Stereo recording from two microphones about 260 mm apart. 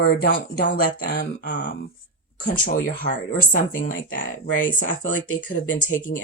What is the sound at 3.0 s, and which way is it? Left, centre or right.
Speech, left.